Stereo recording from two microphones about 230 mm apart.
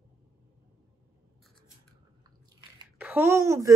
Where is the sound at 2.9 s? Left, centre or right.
Centre.